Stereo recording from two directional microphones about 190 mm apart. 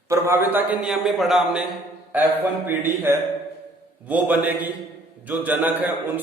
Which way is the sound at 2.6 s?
10° right (ahead or behind).